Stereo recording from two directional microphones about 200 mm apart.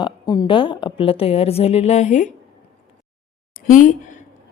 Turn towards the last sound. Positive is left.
turn(degrees=40)  # may be behind; listen again after turning